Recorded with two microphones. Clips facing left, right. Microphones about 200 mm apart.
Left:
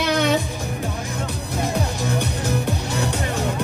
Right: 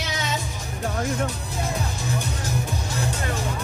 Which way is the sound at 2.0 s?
65° left (ahead or behind).